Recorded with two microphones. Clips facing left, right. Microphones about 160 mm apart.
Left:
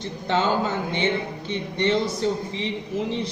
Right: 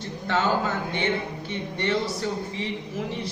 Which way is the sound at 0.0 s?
20° left (ahead or behind).